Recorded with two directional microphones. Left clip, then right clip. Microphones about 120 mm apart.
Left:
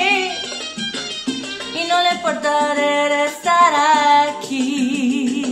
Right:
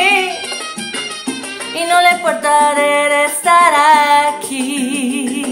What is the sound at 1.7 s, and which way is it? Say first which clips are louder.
Music: right 6 dB; 15° right (ahead or behind).